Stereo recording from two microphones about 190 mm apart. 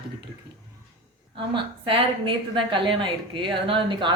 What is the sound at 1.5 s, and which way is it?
A woman's voice, 30° right (ahead or behind).